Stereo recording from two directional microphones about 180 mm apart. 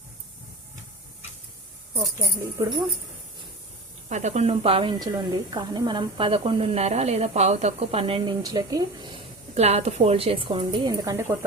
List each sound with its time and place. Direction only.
2.2 s a woman's voice: 20° right (ahead or behind)
4.1 s a woman's voice: 40° right (ahead or behind); by 9.0 s 20° right (ahead or behind)
9.6 s a woman's voice: 35° right (ahead or behind); by 11.3 s 20° right (ahead or behind)